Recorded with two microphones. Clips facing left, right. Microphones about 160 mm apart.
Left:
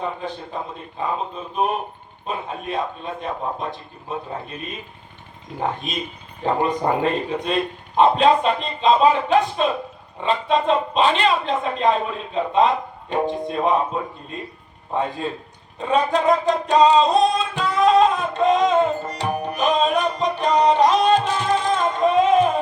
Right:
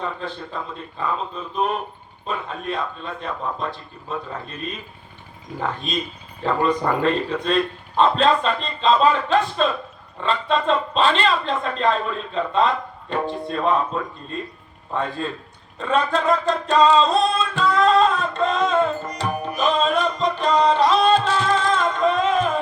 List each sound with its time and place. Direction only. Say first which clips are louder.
0.0 s a man's voice: left 1 dB; 15° left (ahead or behind)
19.5 s music: even; 15° left (ahead or behind)